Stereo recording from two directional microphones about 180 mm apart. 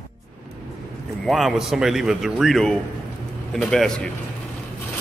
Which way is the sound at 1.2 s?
Centre (ahead or behind).